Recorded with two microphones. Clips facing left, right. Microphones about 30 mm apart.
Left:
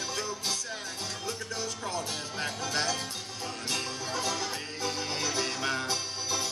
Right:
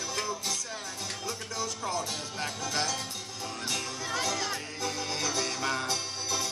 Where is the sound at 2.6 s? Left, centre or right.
Left.